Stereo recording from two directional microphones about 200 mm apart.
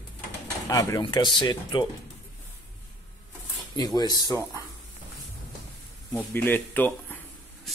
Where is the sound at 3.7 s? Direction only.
20° left (ahead or behind).